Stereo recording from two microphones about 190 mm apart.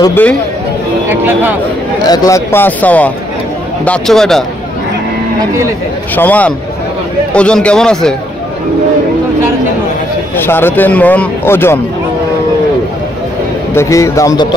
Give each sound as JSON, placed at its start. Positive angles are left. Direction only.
{"t": 0.0, "sound": "speech", "side_deg": 10}
{"t": 1.0, "sound": "speech", "side_deg": -10}
{"t": 2.0, "sound": "a man's voice", "side_deg": 15}
{"t": 6.1, "sound": "a man's voice", "side_deg": 10}
{"t": 10.3, "sound": "speech", "side_deg": 10}
{"t": 13.7, "sound": "speech", "side_deg": 15}